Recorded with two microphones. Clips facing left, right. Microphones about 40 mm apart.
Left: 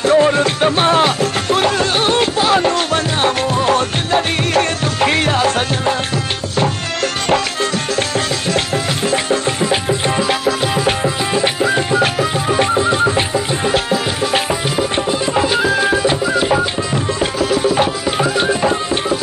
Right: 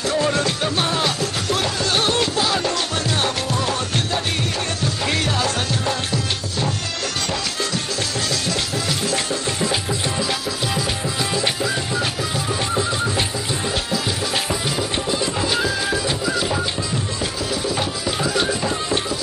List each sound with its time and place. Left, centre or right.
0.0 s music: left
7.2 s music: left
16.9 s tabla: left
18.3 s music: left